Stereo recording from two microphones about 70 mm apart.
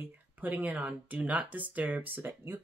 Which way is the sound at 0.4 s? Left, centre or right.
Right.